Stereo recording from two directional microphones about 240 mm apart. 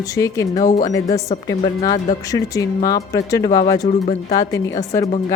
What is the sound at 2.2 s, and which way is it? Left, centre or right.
Speech, centre.